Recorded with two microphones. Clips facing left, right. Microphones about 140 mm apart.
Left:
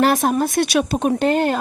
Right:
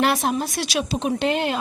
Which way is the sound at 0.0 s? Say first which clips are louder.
Left 5 dB; 45° left (ahead or behind).